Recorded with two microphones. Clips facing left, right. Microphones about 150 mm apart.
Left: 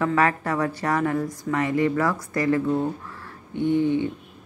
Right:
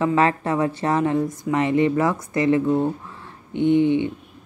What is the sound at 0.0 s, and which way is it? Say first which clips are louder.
A woman's voice: right 3 dB; 25° right (ahead or behind).